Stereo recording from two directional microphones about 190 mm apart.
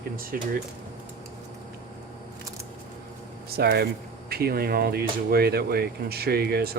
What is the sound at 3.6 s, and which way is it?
Speech, 55° right (ahead or behind).